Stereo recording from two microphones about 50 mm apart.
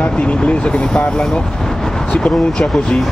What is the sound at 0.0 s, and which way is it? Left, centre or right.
Speech, left.